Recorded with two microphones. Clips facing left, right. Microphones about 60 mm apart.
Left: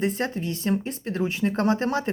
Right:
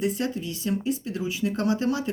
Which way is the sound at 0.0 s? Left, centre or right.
Left.